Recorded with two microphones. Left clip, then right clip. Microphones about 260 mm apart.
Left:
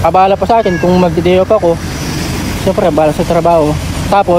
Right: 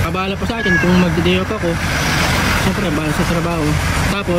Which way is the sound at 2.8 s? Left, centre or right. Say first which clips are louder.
Left 9 dB; centre.